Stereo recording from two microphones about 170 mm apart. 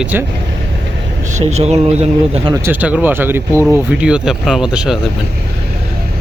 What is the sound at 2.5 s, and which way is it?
Speech, 10° right (ahead or behind).